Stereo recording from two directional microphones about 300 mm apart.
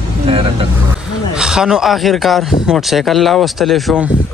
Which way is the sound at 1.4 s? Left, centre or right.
Centre.